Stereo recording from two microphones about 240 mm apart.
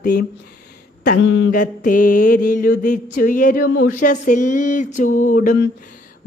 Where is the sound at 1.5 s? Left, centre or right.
Left.